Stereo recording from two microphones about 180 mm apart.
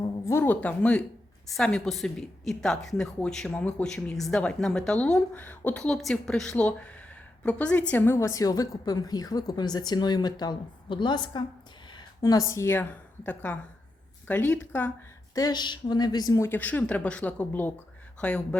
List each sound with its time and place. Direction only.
0.3 s a woman's voice: 10° left (ahead or behind)
15.4 s a woman's voice: 20° left (ahead or behind); by 18.4 s 5° left (ahead or behind)